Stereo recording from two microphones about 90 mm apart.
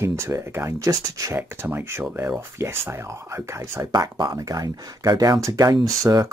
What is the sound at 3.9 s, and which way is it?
Speech, 50° right (ahead or behind).